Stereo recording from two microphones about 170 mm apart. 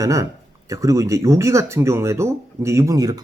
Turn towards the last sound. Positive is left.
turn(degrees=-20)  # may be behind; listen again after turning